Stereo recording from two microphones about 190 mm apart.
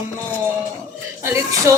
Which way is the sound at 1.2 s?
15° right (ahead or behind).